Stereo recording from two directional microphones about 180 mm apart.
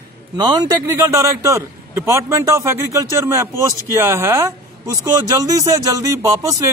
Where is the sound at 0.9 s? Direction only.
15° right (ahead or behind).